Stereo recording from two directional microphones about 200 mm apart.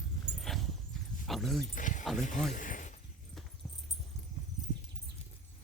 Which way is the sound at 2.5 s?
40° left (ahead or behind).